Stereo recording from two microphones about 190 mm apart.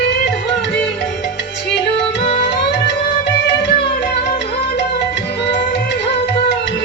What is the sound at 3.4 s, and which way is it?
Music, 65° left (ahead or behind).